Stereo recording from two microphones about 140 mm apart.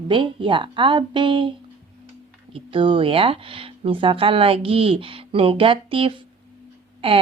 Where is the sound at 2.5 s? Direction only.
40° right (ahead or behind).